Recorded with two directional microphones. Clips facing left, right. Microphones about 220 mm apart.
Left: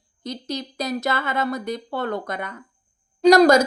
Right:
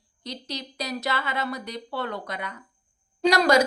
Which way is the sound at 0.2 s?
50° left (ahead or behind).